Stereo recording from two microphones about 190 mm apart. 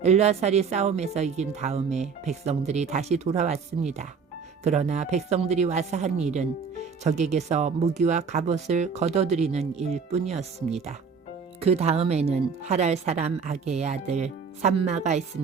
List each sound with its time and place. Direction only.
0.0 s speech: 35° right (ahead or behind)